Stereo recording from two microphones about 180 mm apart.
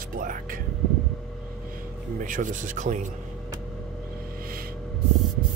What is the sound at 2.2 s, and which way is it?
Speech, 45° right (ahead or behind).